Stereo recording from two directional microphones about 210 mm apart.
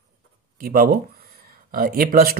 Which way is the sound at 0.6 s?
40° right (ahead or behind).